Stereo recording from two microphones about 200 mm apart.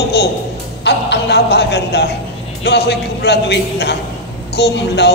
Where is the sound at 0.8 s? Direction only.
60° left (ahead or behind).